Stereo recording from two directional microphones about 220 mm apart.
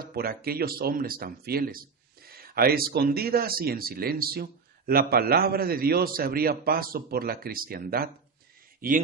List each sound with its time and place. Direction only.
0.0 s speech: 45° right (ahead or behind)